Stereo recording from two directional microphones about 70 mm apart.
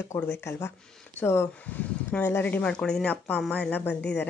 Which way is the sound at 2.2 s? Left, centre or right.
Left.